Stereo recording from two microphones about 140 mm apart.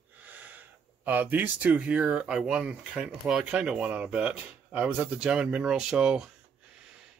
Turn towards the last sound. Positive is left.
turn(degrees=-5)  # may be behind; listen again after turning